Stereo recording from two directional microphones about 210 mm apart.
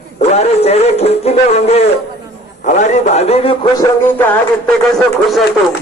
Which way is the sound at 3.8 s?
10° left (ahead or behind).